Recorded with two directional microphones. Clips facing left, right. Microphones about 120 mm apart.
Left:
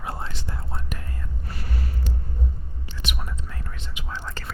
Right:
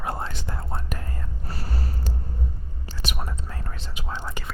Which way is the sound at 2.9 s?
40° right (ahead or behind).